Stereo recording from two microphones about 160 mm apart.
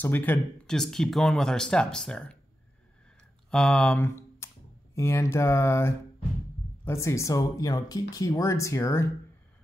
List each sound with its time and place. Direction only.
0.0 s speech: 10° left (ahead or behind)
3.4 s speech: 5° left (ahead or behind)